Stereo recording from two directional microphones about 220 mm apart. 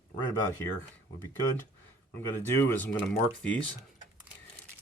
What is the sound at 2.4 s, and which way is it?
Speech, 10° left (ahead or behind).